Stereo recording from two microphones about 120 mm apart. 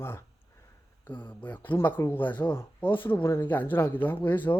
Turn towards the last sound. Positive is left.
turn(degrees=15)  # may be behind; listen again after turning